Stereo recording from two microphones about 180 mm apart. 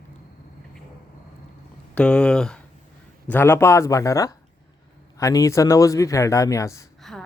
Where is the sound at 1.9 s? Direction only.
5° left (ahead or behind).